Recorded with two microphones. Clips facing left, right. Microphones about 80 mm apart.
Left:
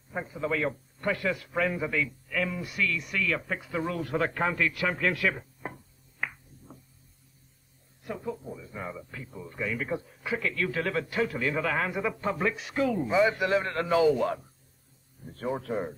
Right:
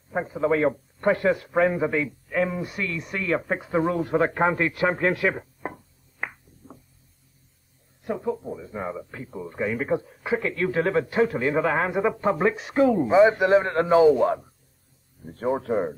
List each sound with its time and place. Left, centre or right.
0.1 s speech: right
6.2 s a sound: right
8.1 s speech: right